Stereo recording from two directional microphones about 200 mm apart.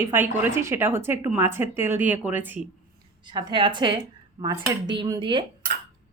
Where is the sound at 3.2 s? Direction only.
25° right (ahead or behind).